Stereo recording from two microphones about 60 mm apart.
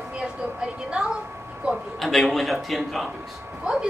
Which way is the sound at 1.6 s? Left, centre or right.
Right.